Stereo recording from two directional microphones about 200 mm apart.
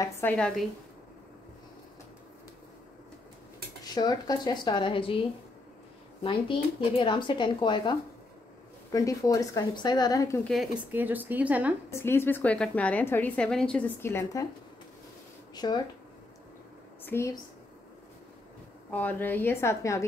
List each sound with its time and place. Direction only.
0.0 s a woman's voice: 10° left (ahead or behind)
3.8 s speech: 20° left (ahead or behind)
6.2 s a woman's voice: 25° left (ahead or behind)
10.5 s a woman's voice: 5° right (ahead or behind)
11.9 s a woman's voice: 10° left (ahead or behind)
15.5 s speech: 20° left (ahead or behind)
17.0 s speech: 10° left (ahead or behind)
18.9 s a woman's voice: 10° left (ahead or behind)